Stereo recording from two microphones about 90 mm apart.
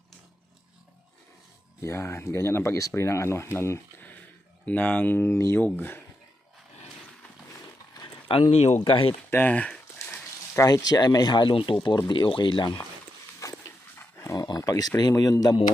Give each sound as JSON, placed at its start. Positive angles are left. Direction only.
{"t": 1.8, "sound": "speech", "side_deg": 30}
{"t": 5.6, "sound": "speech", "side_deg": 20}
{"t": 8.0, "sound": "speech", "side_deg": 85}
{"t": 9.3, "sound": "speech", "side_deg": 20}
{"t": 10.7, "sound": "speech", "side_deg": 50}
{"t": 12.0, "sound": "speech", "side_deg": 60}
{"t": 13.4, "sound": "dog", "side_deg": 40}
{"t": 14.6, "sound": "speech", "side_deg": 45}